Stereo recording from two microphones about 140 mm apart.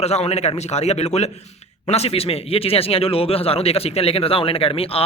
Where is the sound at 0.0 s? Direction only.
50° left (ahead or behind).